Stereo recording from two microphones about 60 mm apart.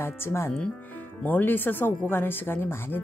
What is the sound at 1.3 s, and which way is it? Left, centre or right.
A woman's voice, left.